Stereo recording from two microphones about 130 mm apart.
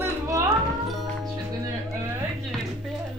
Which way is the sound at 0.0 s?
25° right (ahead or behind).